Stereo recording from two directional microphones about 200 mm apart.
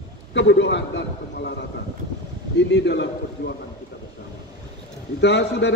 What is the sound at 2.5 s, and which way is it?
Speech, 60° left (ahead or behind).